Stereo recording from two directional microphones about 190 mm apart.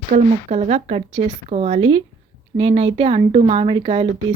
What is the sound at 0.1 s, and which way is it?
Speech, 35° right (ahead or behind).